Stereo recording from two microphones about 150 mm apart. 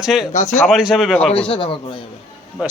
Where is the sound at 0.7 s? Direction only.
5° right (ahead or behind).